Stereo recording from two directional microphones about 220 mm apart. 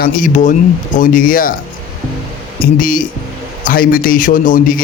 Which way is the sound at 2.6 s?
40° left (ahead or behind).